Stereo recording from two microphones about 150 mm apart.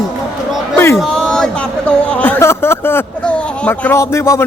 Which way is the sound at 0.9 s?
5° left (ahead or behind).